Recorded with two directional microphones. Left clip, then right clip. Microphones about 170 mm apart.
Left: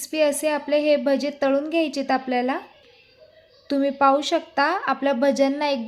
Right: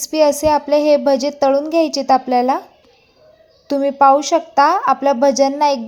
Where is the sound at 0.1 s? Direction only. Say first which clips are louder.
Right 8 dB; 15° right (ahead or behind).